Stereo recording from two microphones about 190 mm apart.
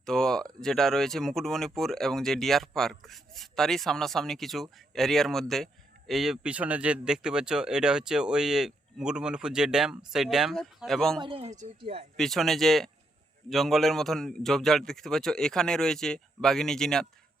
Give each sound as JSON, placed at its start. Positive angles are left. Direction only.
{"t": 0.0, "sound": "speech", "side_deg": 5}
{"t": 11.2, "sound": "speech", "side_deg": -30}
{"t": 12.1, "sound": "speech", "side_deg": 0}